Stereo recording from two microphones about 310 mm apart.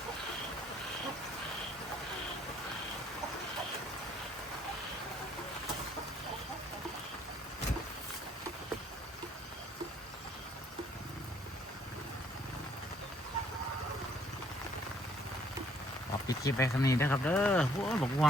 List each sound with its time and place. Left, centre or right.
16.2 s speech: centre